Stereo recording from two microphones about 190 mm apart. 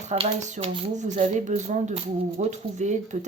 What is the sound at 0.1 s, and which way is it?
Speech, 40° right (ahead or behind).